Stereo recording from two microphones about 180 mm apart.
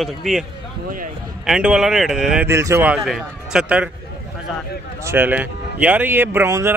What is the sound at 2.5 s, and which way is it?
Speech, 15° right (ahead or behind).